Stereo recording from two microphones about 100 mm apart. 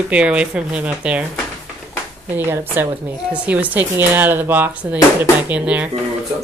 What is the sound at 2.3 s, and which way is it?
Speech, 20° right (ahead or behind).